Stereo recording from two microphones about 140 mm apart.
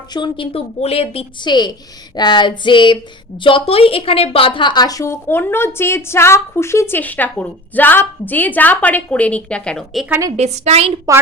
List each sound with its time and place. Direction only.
0.1 s a woman's voice: 35° left (ahead or behind)
1.5 s a woman's voice: 30° left (ahead or behind); by 10.1 s centre (ahead or behind)
10.1 s a woman's voice: 25° right (ahead or behind)
10.3 s a woman's voice: 55° right (ahead or behind)